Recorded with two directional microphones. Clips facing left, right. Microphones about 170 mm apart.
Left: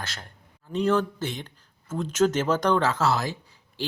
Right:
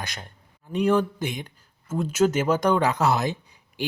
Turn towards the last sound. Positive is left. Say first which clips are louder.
# right 2 dB
turn(degrees=-15)  # may be behind; listen again after turning